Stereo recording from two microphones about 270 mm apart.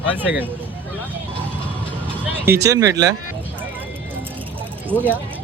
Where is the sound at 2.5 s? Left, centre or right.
Centre.